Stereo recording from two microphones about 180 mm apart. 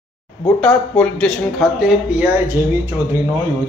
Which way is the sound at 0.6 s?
5° left (ahead or behind).